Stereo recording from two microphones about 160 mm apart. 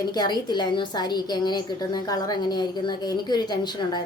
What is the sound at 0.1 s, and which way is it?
A woman's voice, 25° left (ahead or behind).